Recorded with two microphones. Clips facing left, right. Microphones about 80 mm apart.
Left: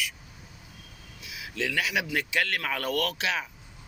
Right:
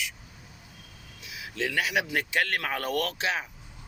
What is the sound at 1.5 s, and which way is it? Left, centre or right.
Speech, right.